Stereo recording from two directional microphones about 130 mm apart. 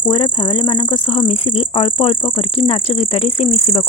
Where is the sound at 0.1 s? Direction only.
40° left (ahead or behind).